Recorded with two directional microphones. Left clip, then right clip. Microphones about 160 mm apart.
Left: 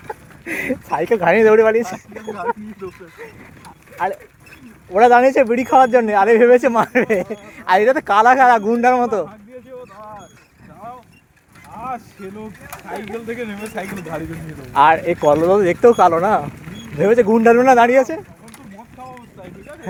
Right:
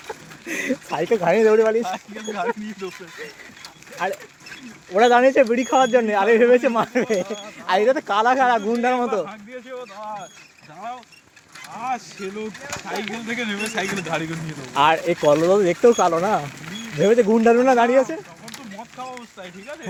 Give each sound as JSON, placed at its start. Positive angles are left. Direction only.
{"t": 0.1, "sound": "a sound", "side_deg": 15}
{"t": 1.2, "sound": "speech", "side_deg": 40}
{"t": 2.3, "sound": "speech", "side_deg": 5}
{"t": 4.9, "sound": "speech", "side_deg": 30}
{"t": 11.9, "sound": "speech", "side_deg": 70}
{"t": 13.2, "sound": "speech", "side_deg": 55}
{"t": 14.7, "sound": "speech", "side_deg": 25}
{"t": 17.0, "sound": "speech", "side_deg": 30}